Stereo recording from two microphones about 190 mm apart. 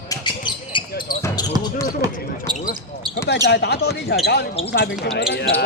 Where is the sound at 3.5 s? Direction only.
60° left (ahead or behind).